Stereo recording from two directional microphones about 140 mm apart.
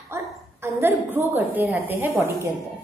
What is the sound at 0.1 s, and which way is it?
Dog, 20° right (ahead or behind).